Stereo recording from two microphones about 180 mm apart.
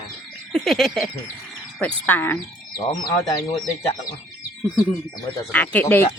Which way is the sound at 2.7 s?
20° left (ahead or behind).